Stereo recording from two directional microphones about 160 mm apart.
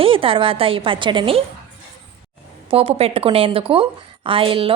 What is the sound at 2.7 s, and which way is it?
A woman's voice, 40° right (ahead or behind).